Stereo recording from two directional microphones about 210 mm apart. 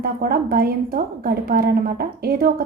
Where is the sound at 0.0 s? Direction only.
45° right (ahead or behind).